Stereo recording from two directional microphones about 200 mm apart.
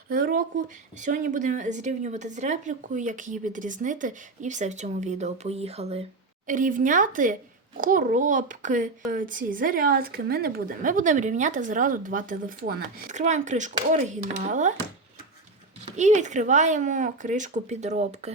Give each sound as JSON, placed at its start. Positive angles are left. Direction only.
{"t": 0.1, "sound": "a sound", "side_deg": -45}
{"t": 1.0, "sound": "speech", "side_deg": -40}
{"t": 16.0, "sound": "speech", "side_deg": -35}